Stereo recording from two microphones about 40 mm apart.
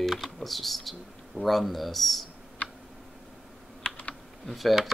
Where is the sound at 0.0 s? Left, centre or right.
Centre.